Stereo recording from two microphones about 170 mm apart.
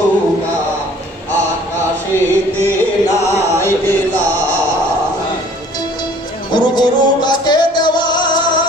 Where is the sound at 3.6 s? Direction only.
10° left (ahead or behind).